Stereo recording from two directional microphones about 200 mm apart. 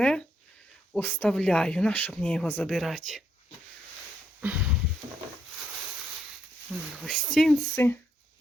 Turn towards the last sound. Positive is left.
turn(degrees=10)  # may be behind; listen again after turning